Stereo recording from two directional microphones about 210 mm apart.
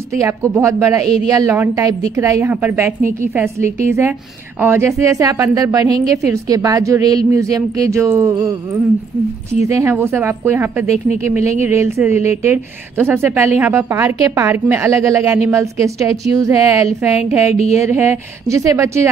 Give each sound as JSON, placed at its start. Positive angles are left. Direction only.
{"t": 0.1, "sound": "a woman's voice", "side_deg": -15}
{"t": 9.7, "sound": "a woman's voice", "side_deg": -15}
{"t": 11.3, "sound": "speech", "side_deg": 30}
{"t": 11.6, "sound": "a woman's voice", "side_deg": -10}
{"t": 17.5, "sound": "speech", "side_deg": 30}
{"t": 17.8, "sound": "a woman's voice", "side_deg": -10}